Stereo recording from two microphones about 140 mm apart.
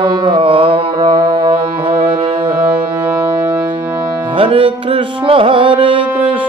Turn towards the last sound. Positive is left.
turn(degrees=-35)  # may be behind; listen again after turning